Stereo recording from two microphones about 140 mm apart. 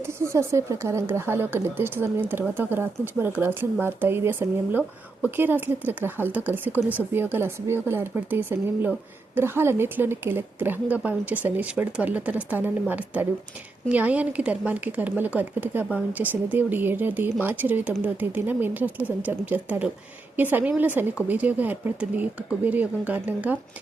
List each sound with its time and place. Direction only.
0.0 s speech: 20° right (ahead or behind)